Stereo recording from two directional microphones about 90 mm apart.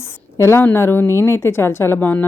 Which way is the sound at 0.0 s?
30° left (ahead or behind).